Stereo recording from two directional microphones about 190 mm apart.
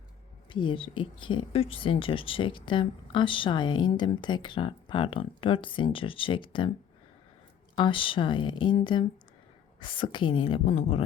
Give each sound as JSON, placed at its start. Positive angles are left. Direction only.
{"t": 0.5, "sound": "speech", "side_deg": 25}
{"t": 7.8, "sound": "speech", "side_deg": 25}